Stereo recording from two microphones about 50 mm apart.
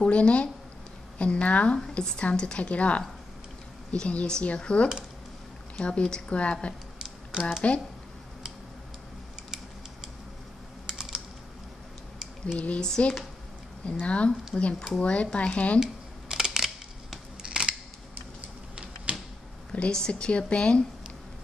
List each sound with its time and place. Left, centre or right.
0.0 s a woman's voice: left
7.3 s speech: centre
10.9 s typing: centre
12.5 s a woman's voice: left
12.8 s speech: centre
13.8 s a woman's voice: left
15.8 s camera: centre
17.4 s scissors: centre
19.7 s a woman's voice: centre